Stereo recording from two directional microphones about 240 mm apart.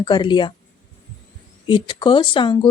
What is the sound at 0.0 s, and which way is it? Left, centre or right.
Speech, centre.